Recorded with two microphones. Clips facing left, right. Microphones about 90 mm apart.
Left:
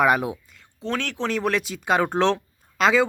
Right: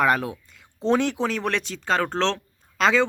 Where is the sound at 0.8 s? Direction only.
20° right (ahead or behind).